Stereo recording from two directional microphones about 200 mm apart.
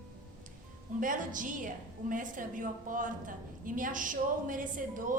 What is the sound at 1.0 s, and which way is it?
A woman's voice, 40° right (ahead or behind).